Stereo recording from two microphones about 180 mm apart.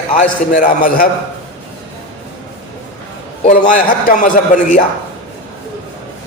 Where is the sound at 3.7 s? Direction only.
50° left (ahead or behind).